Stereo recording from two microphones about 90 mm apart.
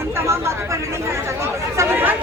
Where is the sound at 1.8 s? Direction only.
25° right (ahead or behind).